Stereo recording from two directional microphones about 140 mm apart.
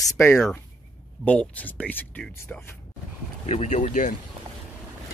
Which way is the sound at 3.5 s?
55° left (ahead or behind).